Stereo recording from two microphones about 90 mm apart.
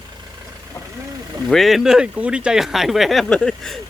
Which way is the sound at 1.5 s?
Centre (ahead or behind).